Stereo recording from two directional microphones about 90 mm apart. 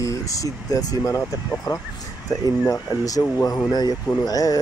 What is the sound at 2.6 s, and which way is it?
Speech, 40° left (ahead or behind).